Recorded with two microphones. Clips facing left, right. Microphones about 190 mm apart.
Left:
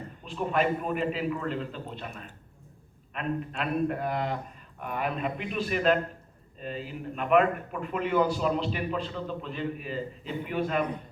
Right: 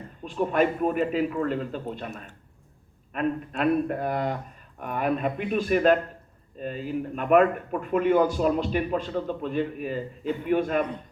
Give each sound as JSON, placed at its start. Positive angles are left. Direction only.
{"t": 0.3, "sound": "speech", "side_deg": -45}